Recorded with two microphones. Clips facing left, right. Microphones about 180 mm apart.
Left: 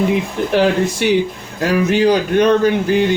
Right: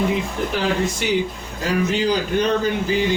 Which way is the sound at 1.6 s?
70° left (ahead or behind).